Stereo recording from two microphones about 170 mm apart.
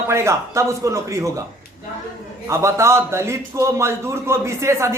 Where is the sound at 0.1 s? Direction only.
15° right (ahead or behind).